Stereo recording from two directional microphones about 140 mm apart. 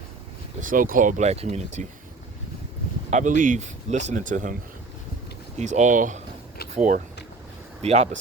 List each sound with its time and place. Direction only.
0.6 s speech: 75° right (ahead or behind); by 1.9 s 55° right (ahead or behind)
3.1 s speech: 60° right (ahead or behind)
5.5 s speech: 55° right (ahead or behind)
7.8 s speech: 50° right (ahead or behind)